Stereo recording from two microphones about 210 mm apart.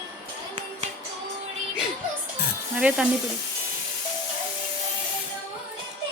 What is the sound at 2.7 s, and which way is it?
Speech, 5° right (ahead or behind).